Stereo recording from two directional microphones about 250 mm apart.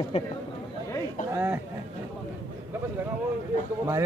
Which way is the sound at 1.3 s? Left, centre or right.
Centre.